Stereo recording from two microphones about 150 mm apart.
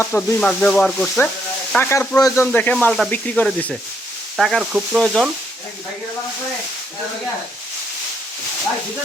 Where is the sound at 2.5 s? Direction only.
10° left (ahead or behind).